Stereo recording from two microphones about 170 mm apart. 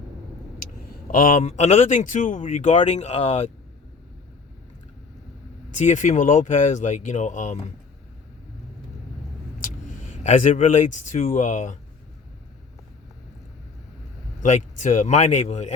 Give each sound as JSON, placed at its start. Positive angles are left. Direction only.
{"t": 1.1, "sound": "speech", "side_deg": 50}
{"t": 5.7, "sound": "speech", "side_deg": 45}
{"t": 9.6, "sound": "speech", "side_deg": 45}
{"t": 14.4, "sound": "speech", "side_deg": 45}